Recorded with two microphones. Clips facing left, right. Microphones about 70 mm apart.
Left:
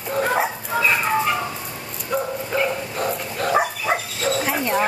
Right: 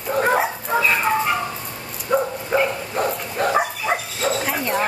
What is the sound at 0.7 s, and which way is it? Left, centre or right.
Chicken, centre.